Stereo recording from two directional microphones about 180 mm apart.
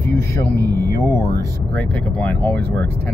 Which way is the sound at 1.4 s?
15° left (ahead or behind).